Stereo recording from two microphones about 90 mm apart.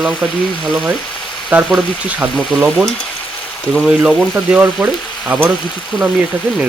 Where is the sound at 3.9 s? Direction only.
10° right (ahead or behind).